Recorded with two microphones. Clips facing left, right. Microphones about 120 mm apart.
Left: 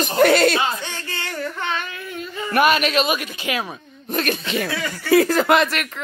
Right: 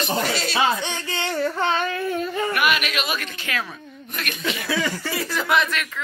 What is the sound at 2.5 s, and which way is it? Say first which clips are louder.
Speech: left 10 dB; 30° left (ahead or behind).